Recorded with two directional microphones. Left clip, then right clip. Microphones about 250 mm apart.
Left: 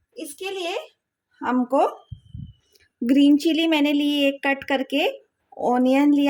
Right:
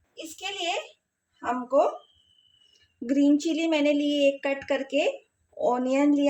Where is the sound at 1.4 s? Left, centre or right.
Left.